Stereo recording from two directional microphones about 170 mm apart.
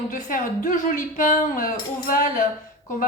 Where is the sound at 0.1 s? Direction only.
50° left (ahead or behind).